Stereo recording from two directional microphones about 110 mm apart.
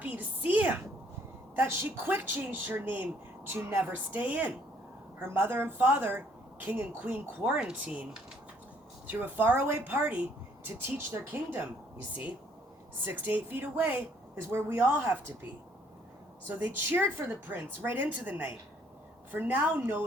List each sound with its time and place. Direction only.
0.0 s a sound: 15° right (ahead or behind)
1.5 s a woman's voice: 20° right (ahead or behind)
9.0 s a woman's voice: 15° right (ahead or behind)
13.1 s a woman's voice: 15° right (ahead or behind)
16.5 s a woman's voice: 15° right (ahead or behind)